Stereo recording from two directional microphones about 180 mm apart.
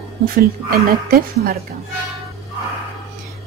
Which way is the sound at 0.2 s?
55° right (ahead or behind).